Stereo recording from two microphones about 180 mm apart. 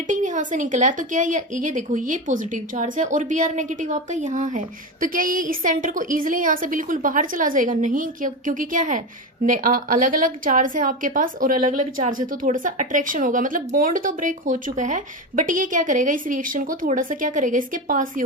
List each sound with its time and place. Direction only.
0.1 s a woman's voice: 45° right (ahead or behind)